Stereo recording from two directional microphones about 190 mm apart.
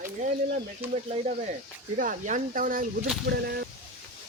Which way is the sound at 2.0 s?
45° right (ahead or behind).